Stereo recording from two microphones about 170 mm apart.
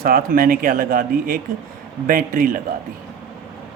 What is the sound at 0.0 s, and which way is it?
Speech, 60° right (ahead or behind).